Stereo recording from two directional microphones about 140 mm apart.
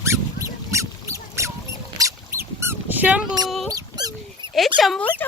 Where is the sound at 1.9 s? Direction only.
20° right (ahead or behind).